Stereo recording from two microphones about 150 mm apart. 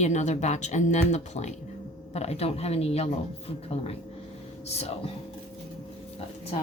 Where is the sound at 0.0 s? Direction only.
50° left (ahead or behind).